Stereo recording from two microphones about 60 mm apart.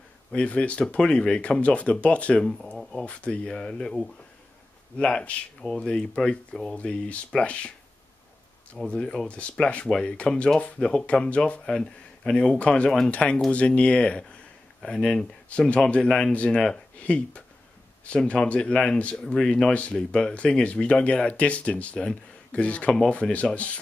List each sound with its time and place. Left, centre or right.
0.3 s speech: centre
2.8 s a sound: centre
3.1 s speech: centre
6.8 s speech: centre
8.8 s speech: centre